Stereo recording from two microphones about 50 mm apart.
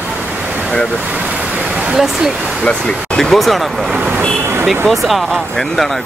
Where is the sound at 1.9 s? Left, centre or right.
Centre.